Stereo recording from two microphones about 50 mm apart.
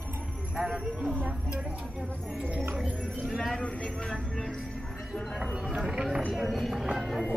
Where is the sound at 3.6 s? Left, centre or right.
Centre.